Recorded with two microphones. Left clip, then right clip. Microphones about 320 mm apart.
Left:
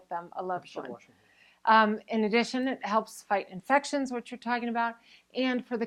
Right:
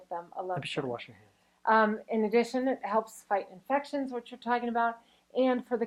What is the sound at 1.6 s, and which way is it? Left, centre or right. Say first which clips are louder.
A woman's voice: left 3 dB; left.